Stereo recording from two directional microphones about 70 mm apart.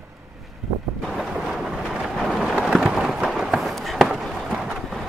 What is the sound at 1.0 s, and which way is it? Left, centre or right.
Train, centre.